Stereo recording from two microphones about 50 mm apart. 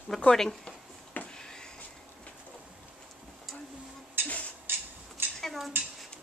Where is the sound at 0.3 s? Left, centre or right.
Centre.